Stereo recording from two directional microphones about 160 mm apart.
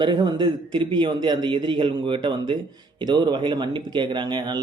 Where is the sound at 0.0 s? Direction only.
30° right (ahead or behind).